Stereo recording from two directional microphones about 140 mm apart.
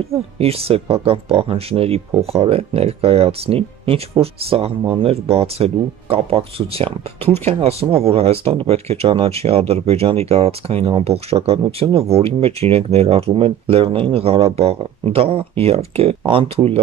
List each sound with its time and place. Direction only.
0.1 s speech: 45° right (ahead or behind)